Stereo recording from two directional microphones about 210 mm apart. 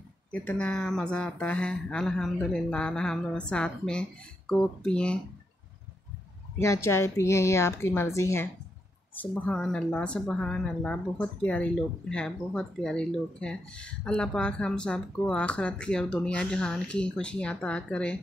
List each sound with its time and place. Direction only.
0.3 s a woman's voice: 5° left (ahead or behind)
6.6 s a woman's voice: 15° left (ahead or behind)